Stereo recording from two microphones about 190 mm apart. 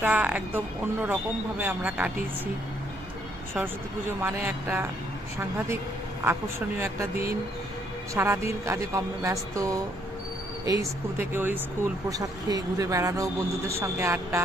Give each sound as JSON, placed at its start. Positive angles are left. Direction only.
{"t": 0.0, "sound": "speech", "side_deg": -5}
{"t": 4.2, "sound": "speech", "side_deg": -10}
{"t": 6.7, "sound": "speech", "side_deg": -15}